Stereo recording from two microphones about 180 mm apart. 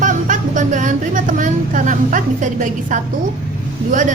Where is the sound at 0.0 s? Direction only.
45° right (ahead or behind).